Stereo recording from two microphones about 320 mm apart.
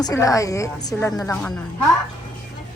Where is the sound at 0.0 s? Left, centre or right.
Centre.